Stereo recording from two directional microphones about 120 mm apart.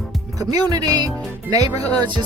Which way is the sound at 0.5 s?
30° right (ahead or behind).